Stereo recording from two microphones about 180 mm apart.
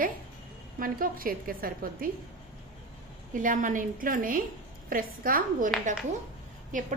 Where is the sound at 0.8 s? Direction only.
50° right (ahead or behind).